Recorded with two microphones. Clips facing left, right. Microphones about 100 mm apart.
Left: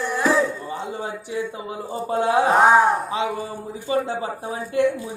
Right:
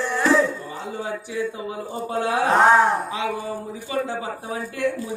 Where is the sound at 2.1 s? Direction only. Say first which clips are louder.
Left 4 dB; 25° left (ahead or behind).